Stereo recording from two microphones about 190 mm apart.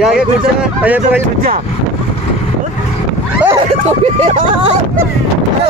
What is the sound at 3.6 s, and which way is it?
Speech, 35° right (ahead or behind).